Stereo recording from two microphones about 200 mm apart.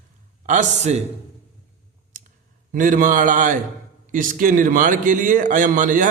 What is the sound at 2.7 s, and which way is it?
A man's voice, 40° right (ahead or behind).